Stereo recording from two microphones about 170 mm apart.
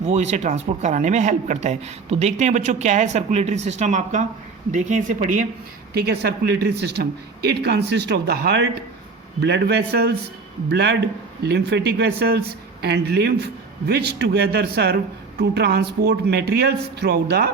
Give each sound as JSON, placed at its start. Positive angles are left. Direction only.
{"t": 0.0, "sound": "speech", "side_deg": -40}
{"t": 5.9, "sound": "a man's voice", "side_deg": -70}
{"t": 10.7, "sound": "a man's voice", "side_deg": -90}